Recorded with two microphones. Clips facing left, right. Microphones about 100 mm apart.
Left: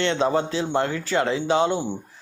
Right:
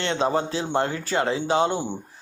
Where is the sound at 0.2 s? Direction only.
30° right (ahead or behind).